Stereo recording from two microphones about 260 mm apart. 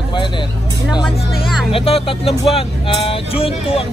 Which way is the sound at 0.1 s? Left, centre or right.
Centre.